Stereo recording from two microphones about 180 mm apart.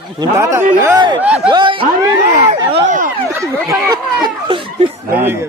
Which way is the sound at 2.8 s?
45° right (ahead or behind).